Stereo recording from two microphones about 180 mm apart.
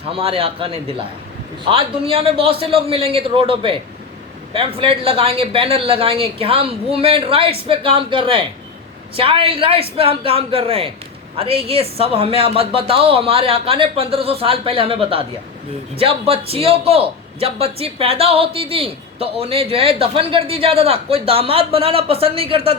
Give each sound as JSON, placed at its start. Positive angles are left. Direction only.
{"t": 0.1, "sound": "a man's voice", "side_deg": -30}